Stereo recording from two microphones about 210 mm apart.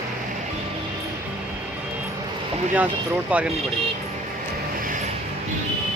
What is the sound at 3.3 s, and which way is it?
Speech, 5° right (ahead or behind).